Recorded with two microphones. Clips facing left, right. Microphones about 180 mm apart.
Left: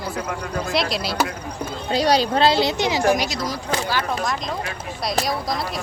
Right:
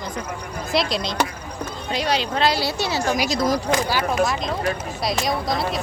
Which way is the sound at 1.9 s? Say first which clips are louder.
Left 5 dB; 35° left (ahead or behind).